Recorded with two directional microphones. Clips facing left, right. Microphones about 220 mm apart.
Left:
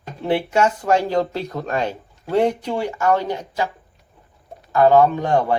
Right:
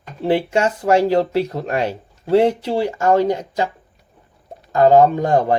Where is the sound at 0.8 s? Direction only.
30° right (ahead or behind).